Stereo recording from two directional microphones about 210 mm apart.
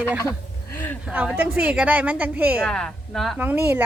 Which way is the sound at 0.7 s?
10° left (ahead or behind).